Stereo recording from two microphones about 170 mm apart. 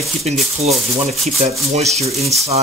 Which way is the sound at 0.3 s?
40° right (ahead or behind).